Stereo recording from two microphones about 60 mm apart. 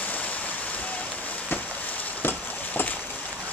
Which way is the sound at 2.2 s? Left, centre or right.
Left.